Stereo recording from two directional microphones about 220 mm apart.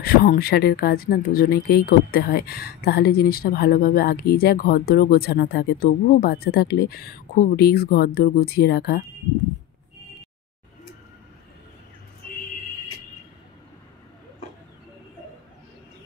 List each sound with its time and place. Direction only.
0.0 s speech: 40° left (ahead or behind)